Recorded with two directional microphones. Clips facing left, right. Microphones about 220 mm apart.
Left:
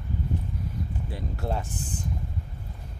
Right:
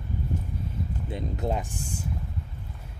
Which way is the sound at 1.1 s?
20° right (ahead or behind).